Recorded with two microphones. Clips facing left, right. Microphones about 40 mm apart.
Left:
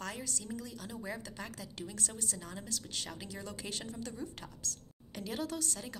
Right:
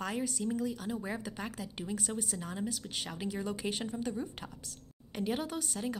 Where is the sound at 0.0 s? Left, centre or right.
Centre.